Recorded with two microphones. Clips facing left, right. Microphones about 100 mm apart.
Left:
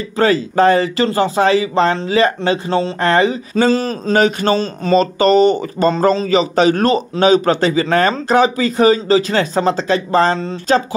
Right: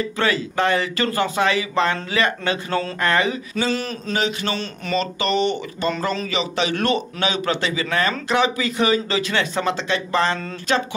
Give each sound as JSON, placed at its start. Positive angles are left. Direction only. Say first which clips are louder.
{"t": 0.2, "sound": "speech", "louder": "left 9 dB", "side_deg": 35}